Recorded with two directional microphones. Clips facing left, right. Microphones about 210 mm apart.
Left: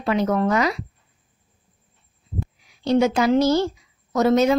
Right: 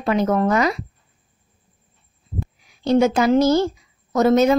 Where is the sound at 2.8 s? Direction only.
50° right (ahead or behind).